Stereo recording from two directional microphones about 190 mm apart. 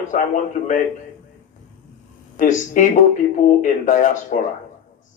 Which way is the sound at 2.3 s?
45° left (ahead or behind).